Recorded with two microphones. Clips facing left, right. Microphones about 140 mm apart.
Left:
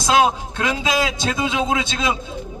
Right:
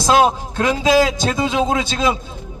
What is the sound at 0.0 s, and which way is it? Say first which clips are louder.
Speech: right 2 dB; 35° right (ahead or behind).